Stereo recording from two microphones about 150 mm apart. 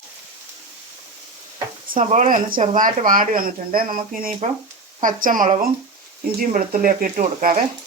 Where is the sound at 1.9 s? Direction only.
45° right (ahead or behind); by 4.3 s 70° right (ahead or behind).